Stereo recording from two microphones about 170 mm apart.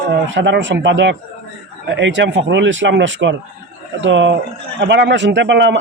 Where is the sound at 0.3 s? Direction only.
90° right.